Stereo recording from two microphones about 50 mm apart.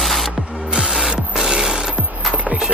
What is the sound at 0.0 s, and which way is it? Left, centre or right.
Music, centre.